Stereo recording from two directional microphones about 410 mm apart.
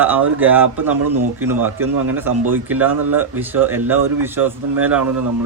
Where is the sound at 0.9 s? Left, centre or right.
Right.